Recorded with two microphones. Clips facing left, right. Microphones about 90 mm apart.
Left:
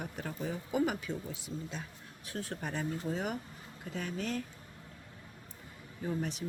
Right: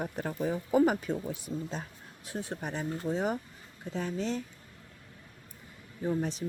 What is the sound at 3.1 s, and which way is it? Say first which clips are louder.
Speech: right 5 dB; 30° right (ahead or behind).